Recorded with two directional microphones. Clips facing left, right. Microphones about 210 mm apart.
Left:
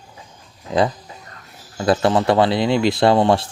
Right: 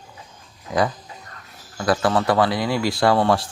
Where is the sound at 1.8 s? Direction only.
25° left (ahead or behind).